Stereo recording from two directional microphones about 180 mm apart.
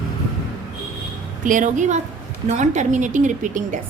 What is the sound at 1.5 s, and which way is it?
A woman's voice, 45° right (ahead or behind).